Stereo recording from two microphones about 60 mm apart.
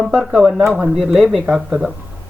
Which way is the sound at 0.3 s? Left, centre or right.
Centre.